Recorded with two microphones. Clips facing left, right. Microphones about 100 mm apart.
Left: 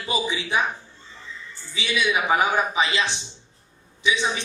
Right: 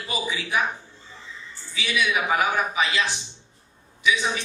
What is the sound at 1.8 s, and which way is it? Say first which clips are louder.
A man's voice: left 1 dB; 25° left (ahead or behind).